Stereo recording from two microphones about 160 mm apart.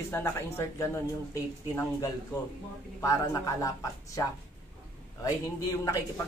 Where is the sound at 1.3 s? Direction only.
20° left (ahead or behind).